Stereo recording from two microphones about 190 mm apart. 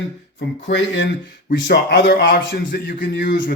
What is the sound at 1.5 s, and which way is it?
Speech, 60° left (ahead or behind).